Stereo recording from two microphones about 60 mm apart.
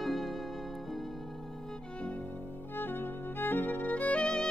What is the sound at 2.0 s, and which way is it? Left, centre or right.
Music, left.